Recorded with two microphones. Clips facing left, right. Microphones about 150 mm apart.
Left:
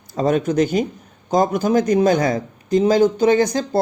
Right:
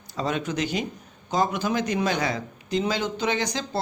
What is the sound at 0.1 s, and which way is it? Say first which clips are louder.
A man's voice: left 9 dB; 45° left (ahead or behind).